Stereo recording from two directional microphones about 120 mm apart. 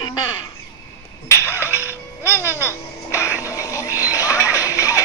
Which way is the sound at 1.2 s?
20° left (ahead or behind).